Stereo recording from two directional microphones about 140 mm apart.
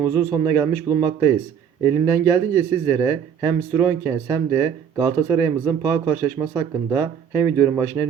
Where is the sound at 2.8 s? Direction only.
25° right (ahead or behind).